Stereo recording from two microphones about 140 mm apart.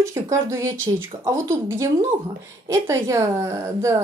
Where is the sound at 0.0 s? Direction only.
20° right (ahead or behind).